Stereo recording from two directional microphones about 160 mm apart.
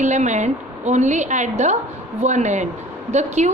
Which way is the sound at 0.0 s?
50° right (ahead or behind).